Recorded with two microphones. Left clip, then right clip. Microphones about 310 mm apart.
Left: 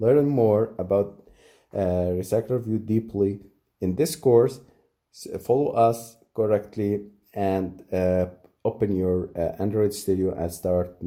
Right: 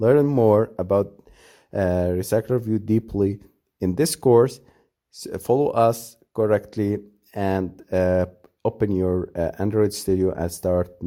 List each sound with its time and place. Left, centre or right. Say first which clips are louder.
0.0 s speech: right 2 dB; right